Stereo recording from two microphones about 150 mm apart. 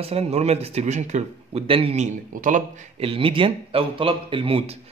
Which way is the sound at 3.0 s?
35° right (ahead or behind).